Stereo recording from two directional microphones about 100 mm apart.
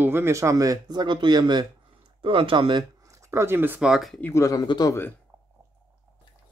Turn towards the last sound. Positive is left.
turn(degrees=40)  # may be behind; listen again after turning